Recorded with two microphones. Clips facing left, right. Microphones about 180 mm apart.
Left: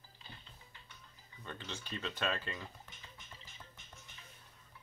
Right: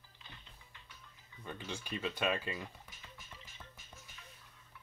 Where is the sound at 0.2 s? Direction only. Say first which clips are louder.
Left 1 dB; 35° left (ahead or behind).